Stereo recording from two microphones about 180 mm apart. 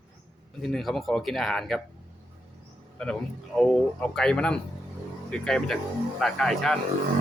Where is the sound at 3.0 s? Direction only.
5° left (ahead or behind).